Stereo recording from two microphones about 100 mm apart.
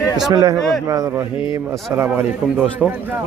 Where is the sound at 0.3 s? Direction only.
35° right (ahead or behind).